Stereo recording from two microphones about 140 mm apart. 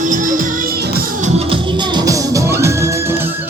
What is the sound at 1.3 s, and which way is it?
Music, 45° right (ahead or behind).